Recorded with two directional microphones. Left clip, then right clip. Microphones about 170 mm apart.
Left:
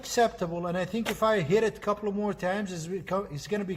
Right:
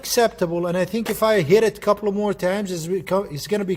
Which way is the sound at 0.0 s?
40° right (ahead or behind).